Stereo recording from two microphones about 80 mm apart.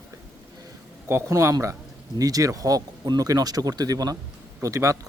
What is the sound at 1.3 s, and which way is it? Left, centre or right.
Speech, right.